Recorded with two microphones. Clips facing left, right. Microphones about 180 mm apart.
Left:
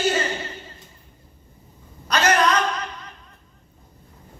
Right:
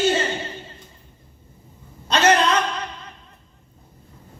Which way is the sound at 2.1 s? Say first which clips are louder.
Right 2 dB; 25° right (ahead or behind).